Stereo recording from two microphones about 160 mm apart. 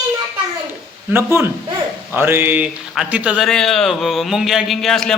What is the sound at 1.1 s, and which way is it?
A man's voice, 15° right (ahead or behind).